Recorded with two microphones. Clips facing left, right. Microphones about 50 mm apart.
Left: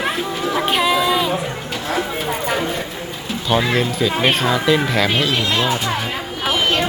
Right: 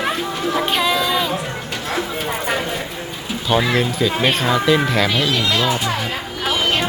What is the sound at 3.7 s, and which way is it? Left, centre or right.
A woman's voice, centre.